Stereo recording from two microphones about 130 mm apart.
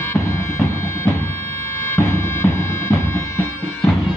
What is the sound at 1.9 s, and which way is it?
Bagpipes, 20° left (ahead or behind).